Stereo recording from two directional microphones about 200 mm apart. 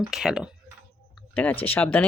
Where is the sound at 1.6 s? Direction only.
5° left (ahead or behind).